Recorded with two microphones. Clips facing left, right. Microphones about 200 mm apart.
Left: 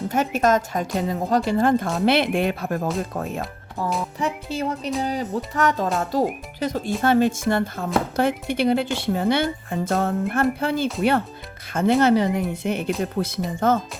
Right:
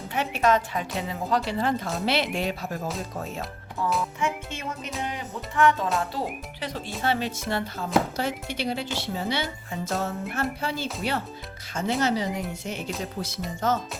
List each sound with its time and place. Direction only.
0.1 s speech: 45° left (ahead or behind)
4.4 s music: 35° left (ahead or behind)
6.0 s speech: 40° left (ahead or behind)